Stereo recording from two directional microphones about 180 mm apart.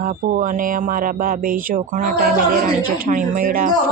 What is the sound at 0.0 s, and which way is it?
Speech, 50° right (ahead or behind).